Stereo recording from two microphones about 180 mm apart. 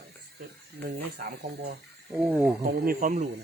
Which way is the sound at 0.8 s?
60° right (ahead or behind).